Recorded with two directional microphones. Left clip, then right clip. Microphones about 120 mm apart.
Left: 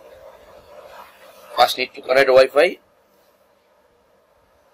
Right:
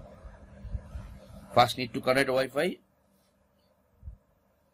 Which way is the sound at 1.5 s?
20° right (ahead or behind).